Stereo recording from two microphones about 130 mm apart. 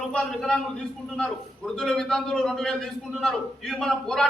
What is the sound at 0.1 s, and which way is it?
A man's voice, 5° left (ahead or behind).